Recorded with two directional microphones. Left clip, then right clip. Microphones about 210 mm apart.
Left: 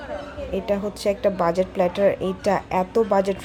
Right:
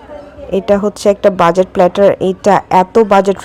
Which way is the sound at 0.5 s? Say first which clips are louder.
Right 13 dB; 20° right (ahead or behind).